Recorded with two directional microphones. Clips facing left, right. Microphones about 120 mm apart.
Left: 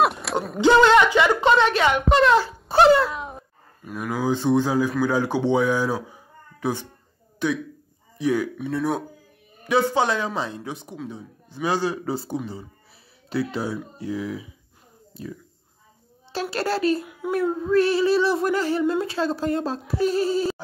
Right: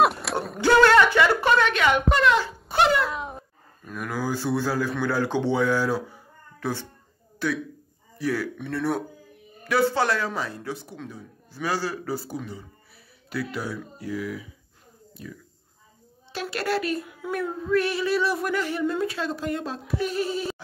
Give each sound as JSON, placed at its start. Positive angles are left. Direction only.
{"t": 0.0, "sound": "a sound", "side_deg": 0}
{"t": 0.6, "sound": "speech", "side_deg": 20}
{"t": 1.7, "sound": "female singing", "side_deg": 30}
{"t": 3.1, "sound": "a sound", "side_deg": 0}
{"t": 3.8, "sound": "speech", "side_deg": 10}
{"t": 8.5, "sound": "speech", "side_deg": 5}
{"t": 9.7, "sound": "a woman's voice", "side_deg": 20}
{"t": 17.3, "sound": "female singing", "side_deg": 30}